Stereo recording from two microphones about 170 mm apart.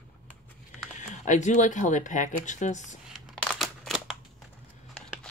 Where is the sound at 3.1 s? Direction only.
Centre (ahead or behind).